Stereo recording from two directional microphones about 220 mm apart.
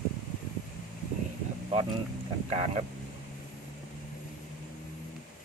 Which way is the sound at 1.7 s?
25° right (ahead or behind).